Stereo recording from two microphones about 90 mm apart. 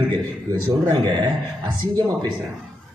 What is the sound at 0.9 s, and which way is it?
Speech, 60° right (ahead or behind).